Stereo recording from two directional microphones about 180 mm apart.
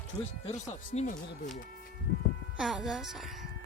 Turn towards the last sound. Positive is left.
turn(degrees=0)  # may be behind; listen again after turning